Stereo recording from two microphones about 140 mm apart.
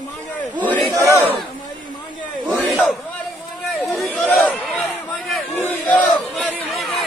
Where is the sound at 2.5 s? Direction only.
Centre (ahead or behind).